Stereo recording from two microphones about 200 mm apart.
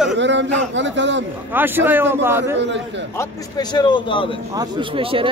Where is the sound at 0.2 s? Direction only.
65° right (ahead or behind).